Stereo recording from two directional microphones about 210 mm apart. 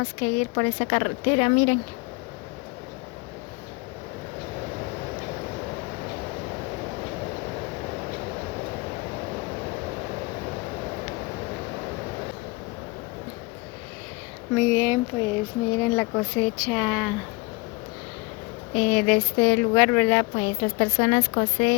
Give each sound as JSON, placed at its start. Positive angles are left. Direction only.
{"t": 0.0, "sound": "speech", "side_deg": 10}
{"t": 14.5, "sound": "speech", "side_deg": -10}
{"t": 18.8, "sound": "speech", "side_deg": 0}